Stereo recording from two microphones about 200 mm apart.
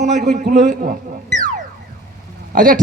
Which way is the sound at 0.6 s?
45° right (ahead or behind).